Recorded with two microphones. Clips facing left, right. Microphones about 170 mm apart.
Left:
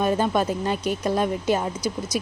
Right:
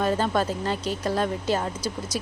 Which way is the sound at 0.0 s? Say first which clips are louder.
Left 2 dB; 15° left (ahead or behind).